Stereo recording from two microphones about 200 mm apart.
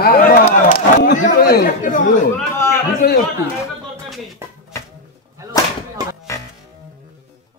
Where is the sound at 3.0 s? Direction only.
50° left (ahead or behind).